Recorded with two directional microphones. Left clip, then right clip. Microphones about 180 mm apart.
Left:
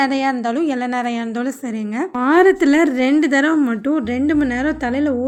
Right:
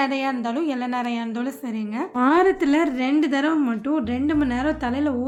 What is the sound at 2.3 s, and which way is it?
A woman's voice, 35° left (ahead or behind).